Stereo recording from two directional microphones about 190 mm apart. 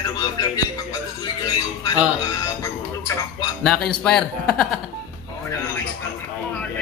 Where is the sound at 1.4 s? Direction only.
20° left (ahead or behind).